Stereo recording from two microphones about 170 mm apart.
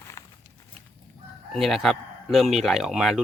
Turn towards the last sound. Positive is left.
turn(degrees=0)  # may be behind; listen again after turning